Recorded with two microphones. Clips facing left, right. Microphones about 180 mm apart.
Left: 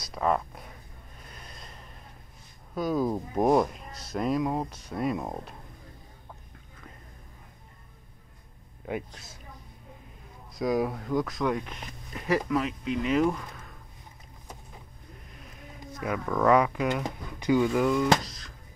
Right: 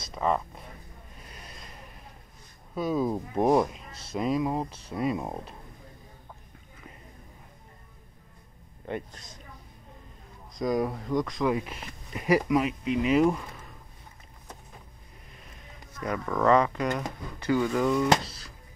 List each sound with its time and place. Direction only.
0.1 s speech: centre (ahead or behind)
2.7 s speech: centre (ahead or behind)
4.6 s speech: 30° right (ahead or behind)
4.9 s speech: centre (ahead or behind)
8.8 s speech: 5° left (ahead or behind)
10.5 s speech: centre (ahead or behind)
16.0 s speech: 5° left (ahead or behind)